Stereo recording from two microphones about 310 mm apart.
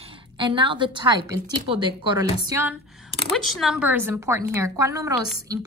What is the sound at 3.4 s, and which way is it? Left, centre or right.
A woman's voice, centre.